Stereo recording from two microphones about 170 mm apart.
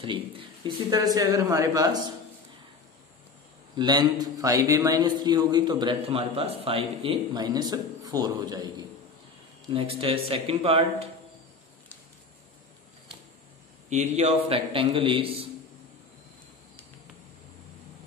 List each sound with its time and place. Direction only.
0.7 s a man's voice: 25° right (ahead or behind)
3.7 s a man's voice: 25° right (ahead or behind)
13.8 s a man's voice: 40° right (ahead or behind)